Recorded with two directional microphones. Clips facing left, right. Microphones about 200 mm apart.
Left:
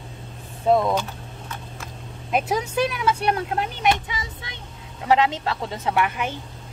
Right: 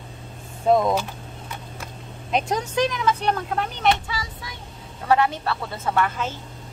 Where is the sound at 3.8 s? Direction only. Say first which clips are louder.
Right 1 dB; 20° left (ahead or behind).